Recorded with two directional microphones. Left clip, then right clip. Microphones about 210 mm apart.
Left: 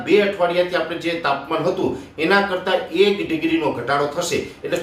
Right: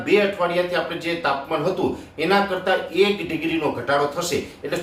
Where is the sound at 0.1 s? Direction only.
5° left (ahead or behind).